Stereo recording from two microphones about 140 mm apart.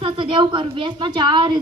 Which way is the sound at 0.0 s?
40° right (ahead or behind).